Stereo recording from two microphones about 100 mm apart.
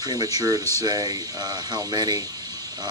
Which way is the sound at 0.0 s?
40° right (ahead or behind).